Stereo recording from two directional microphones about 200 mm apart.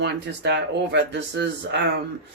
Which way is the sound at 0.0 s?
60° right (ahead or behind).